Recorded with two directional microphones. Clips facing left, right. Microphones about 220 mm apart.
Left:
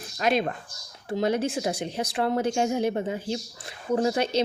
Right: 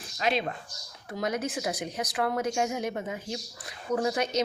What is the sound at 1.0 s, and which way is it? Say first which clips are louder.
A woman's voice: left 6 dB; 30° left (ahead or behind).